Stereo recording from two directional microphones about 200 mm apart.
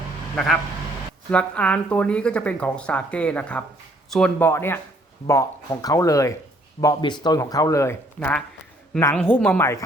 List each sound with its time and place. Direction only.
1.3 s a woman's voice: 5° left (ahead or behind)